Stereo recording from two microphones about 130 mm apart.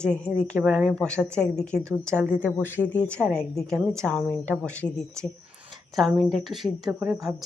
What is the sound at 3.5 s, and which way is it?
Speech, centre (ahead or behind).